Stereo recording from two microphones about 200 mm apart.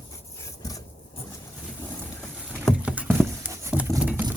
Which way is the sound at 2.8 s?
5° right (ahead or behind).